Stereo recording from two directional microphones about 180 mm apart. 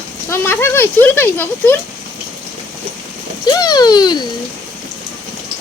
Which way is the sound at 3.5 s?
20° left (ahead or behind).